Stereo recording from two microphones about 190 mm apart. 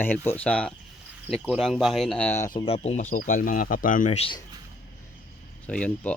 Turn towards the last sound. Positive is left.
turn(degrees=5)  # may be behind; listen again after turning